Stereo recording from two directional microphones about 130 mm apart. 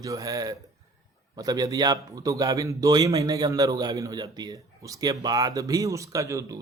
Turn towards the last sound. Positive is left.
turn(degrees=-25)  # may be behind; listen again after turning